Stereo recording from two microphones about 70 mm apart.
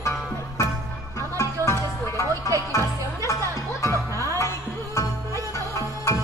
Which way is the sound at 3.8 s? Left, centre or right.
Left.